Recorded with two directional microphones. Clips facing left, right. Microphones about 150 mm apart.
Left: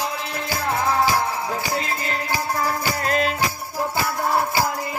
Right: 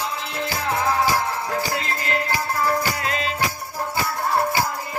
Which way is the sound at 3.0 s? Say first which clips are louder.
Left 4 dB; 50° left (ahead or behind).